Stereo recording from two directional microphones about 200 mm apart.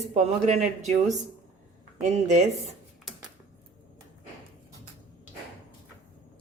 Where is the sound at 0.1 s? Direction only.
35° right (ahead or behind).